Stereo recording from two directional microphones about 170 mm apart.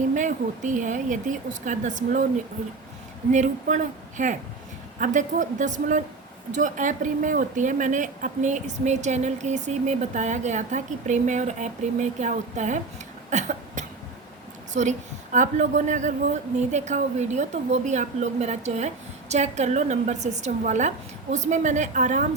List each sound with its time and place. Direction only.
0.1 s speech: 50° right (ahead or behind)
3.3 s speech: 45° right (ahead or behind)
13.3 s cough: 45° right (ahead or behind)
14.7 s speech: 45° right (ahead or behind)